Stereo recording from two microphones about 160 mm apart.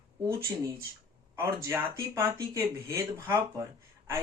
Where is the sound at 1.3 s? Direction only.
20° right (ahead or behind).